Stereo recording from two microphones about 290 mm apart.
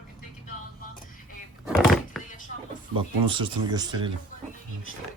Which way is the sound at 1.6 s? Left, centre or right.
Centre.